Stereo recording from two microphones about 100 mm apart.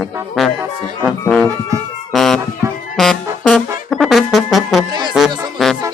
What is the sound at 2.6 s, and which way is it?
Music, 30° right (ahead or behind).